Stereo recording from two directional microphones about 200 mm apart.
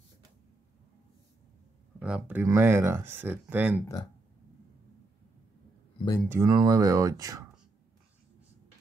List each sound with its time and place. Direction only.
2.0 s speech: 5° right (ahead or behind)
6.2 s speech: 15° right (ahead or behind)